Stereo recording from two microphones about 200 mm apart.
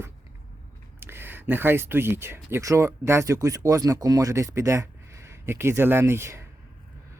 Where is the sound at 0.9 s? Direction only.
10° right (ahead or behind).